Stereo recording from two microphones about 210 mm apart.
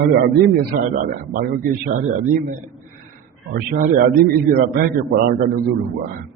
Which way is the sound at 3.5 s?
45° right (ahead or behind).